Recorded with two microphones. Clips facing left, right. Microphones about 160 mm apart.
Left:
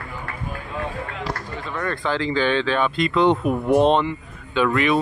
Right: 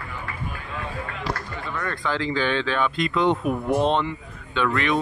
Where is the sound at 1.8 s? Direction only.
25° left (ahead or behind).